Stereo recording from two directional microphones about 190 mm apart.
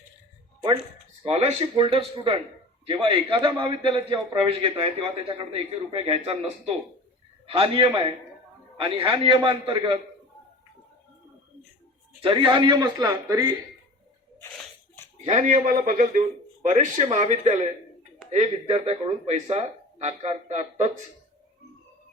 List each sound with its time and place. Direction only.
1.2 s a man's voice: 30° right (ahead or behind)
12.2 s a man's voice: 25° right (ahead or behind)
15.2 s a man's voice: 35° right (ahead or behind)